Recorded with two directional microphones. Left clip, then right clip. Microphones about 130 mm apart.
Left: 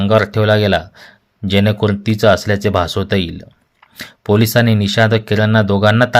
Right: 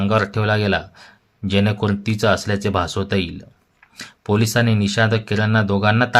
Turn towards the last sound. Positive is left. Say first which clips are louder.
# left 5 dB
turn(degrees=40)  # may be behind; listen again after turning